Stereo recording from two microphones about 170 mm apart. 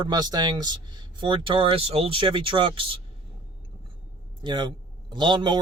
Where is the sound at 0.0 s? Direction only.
25° right (ahead or behind).